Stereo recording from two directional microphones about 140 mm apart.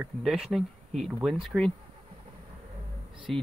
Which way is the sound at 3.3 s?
5° left (ahead or behind).